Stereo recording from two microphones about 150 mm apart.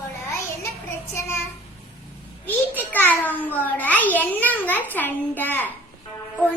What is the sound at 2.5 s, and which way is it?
A child's voice, 10° left (ahead or behind).